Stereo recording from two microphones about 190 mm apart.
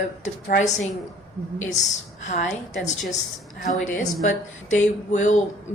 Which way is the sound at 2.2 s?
40° left (ahead or behind).